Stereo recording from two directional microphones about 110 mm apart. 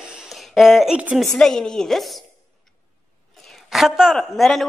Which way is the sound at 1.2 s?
5° left (ahead or behind).